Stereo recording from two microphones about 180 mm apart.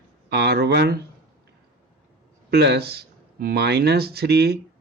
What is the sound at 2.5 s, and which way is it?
Speech, 65° right (ahead or behind).